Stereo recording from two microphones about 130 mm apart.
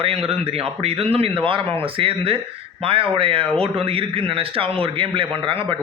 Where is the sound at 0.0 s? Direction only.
45° right (ahead or behind).